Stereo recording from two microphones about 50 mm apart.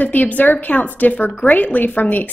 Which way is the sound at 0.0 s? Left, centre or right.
Left.